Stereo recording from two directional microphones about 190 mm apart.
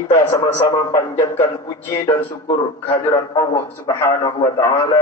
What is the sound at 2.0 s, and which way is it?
A man's voice, 30° left (ahead or behind).